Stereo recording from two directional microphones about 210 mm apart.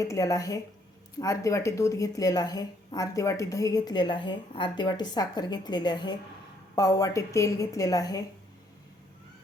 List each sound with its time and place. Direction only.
0.0 s a woman's voice: 15° left (ahead or behind)